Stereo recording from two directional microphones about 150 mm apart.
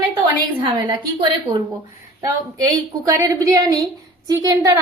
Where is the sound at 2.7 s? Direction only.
20° right (ahead or behind).